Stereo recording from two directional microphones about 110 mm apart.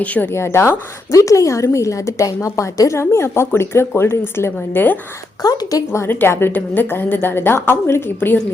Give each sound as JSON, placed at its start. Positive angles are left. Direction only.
{"t": 0.0, "sound": "a woman's voice", "side_deg": 15}
{"t": 5.4, "sound": "a woman's voice", "side_deg": 35}